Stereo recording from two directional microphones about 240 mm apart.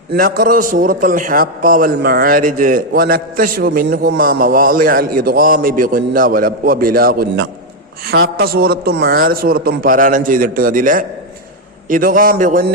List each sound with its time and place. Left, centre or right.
0.1 s a man's voice: right